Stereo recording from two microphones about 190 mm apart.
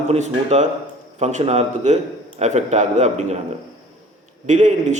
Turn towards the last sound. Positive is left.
turn(degrees=-40)  # may be behind; listen again after turning